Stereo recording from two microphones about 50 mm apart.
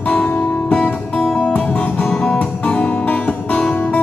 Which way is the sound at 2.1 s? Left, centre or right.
Centre.